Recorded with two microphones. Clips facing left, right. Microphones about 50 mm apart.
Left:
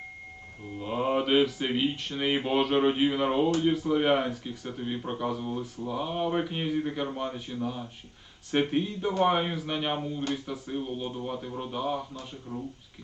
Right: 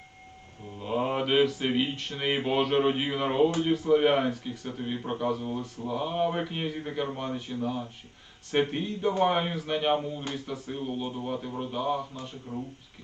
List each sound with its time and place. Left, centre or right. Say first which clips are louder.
0.9 s mantra: even; centre
2.5 s speech: even; centre
12.5 s speech: right 1 dB; right